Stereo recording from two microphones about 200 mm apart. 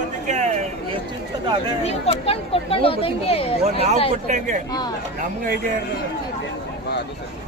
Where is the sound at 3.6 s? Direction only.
35° right (ahead or behind).